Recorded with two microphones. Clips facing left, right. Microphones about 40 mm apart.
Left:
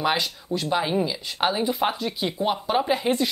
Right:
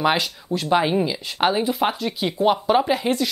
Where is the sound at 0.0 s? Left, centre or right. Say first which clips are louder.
Right 3 dB; centre.